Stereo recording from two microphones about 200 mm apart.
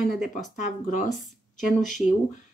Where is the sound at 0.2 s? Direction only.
40° left (ahead or behind).